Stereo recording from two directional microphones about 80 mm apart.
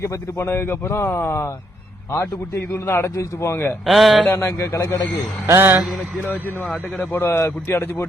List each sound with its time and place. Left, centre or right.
0.0 s a man's voice: left
3.8 s speech: centre
4.4 s a man's voice: left
5.5 s a sound: right
6.2 s a man's voice: left